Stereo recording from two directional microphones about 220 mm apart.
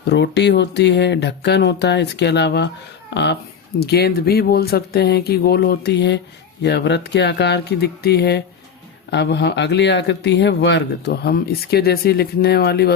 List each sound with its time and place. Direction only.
0.0 s speech: 50° left (ahead or behind)
3.8 s speech: 45° left (ahead or behind)